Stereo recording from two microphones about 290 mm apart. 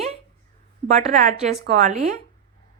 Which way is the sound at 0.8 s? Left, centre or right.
Right.